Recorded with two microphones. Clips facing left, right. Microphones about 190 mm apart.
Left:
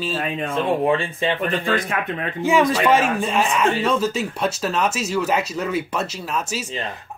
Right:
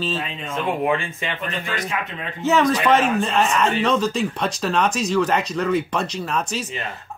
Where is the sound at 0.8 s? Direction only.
35° left (ahead or behind).